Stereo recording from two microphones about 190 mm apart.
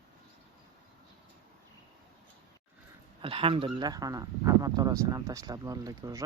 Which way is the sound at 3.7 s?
20° right (ahead or behind).